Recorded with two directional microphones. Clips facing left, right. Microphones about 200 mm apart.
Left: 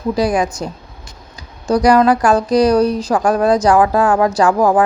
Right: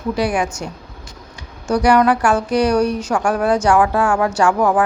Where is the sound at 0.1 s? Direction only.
35° left (ahead or behind).